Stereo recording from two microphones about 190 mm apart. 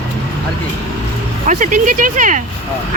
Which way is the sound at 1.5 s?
40° right (ahead or behind).